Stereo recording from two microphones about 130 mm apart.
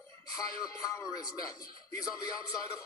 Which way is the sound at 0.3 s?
25° left (ahead or behind).